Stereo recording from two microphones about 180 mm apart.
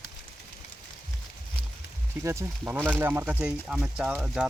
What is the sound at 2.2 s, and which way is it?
Speech, 15° right (ahead or behind).